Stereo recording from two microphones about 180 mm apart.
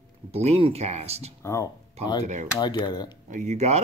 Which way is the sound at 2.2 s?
40° right (ahead or behind).